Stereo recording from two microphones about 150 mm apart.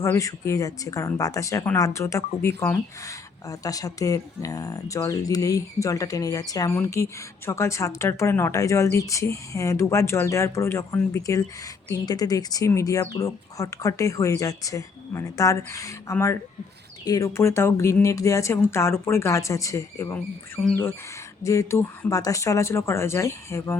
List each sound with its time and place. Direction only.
0.0 s a woman's voice: 20° left (ahead or behind)
21.4 s a woman's voice: 20° left (ahead or behind)